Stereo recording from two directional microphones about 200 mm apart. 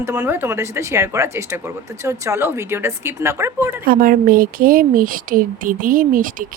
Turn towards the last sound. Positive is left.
turn(degrees=-45)  # may be behind; listen again after turning